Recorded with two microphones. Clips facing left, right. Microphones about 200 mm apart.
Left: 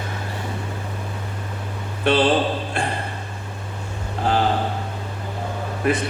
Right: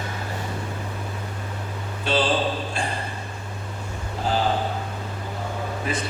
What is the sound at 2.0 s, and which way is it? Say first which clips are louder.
Speech: left 5 dB; 60° left (ahead or behind).